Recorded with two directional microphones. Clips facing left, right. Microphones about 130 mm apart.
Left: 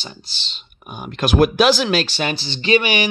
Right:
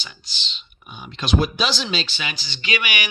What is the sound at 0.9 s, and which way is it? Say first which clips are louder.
Speech: left 5 dB; 50° left (ahead or behind).